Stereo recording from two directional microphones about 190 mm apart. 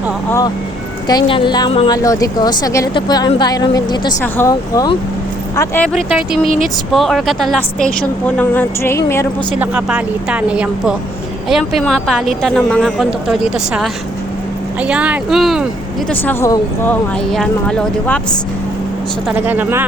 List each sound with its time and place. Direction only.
0.3 s a woman's voice: 15° left (ahead or behind)
5.9 s speech: centre (ahead or behind); by 9.2 s 15° left (ahead or behind)
9.6 s speech: 5° right (ahead or behind)
16.0 s speech: 10° left (ahead or behind)
19.3 s speech: 10° right (ahead or behind)